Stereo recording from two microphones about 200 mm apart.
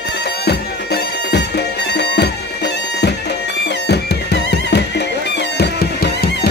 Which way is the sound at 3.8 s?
55° left (ahead or behind).